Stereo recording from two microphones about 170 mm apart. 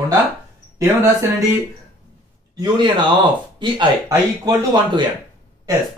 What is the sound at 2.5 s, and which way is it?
A man's voice, 25° right (ahead or behind).